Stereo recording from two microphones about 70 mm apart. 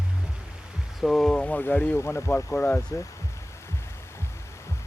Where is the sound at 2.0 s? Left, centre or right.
Left.